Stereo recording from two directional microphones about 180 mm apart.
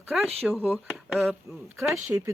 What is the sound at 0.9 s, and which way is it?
Speech, centre (ahead or behind).